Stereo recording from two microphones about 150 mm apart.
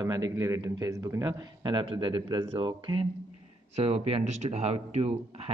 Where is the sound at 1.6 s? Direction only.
35° right (ahead or behind).